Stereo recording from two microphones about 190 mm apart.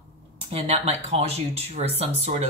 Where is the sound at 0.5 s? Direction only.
30° right (ahead or behind).